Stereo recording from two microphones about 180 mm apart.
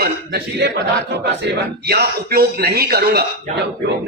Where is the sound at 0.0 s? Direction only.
60° right (ahead or behind).